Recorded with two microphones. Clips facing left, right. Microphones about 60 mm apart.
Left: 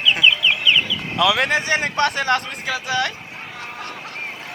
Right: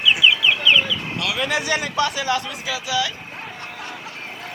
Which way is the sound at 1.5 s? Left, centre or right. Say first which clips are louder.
Left 2 dB; left.